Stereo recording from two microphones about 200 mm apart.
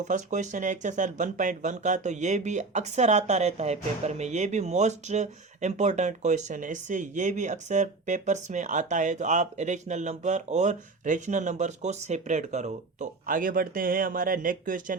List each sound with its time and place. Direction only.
0.0 s speech: 35° right (ahead or behind)